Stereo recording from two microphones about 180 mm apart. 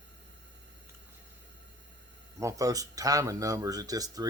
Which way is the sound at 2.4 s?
15° right (ahead or behind).